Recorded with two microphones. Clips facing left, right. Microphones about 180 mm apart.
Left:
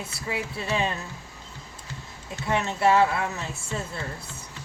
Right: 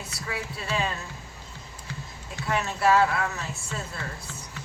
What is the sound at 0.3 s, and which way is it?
Speech, 20° left (ahead or behind).